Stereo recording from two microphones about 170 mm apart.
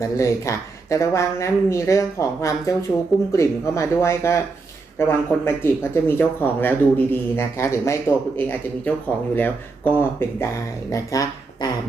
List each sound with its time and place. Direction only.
0.0 s speech: 15° left (ahead or behind)